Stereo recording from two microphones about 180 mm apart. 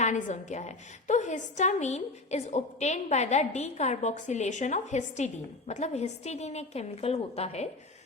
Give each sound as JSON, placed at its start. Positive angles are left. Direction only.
{"t": 0.0, "sound": "a woman's voice", "side_deg": 40}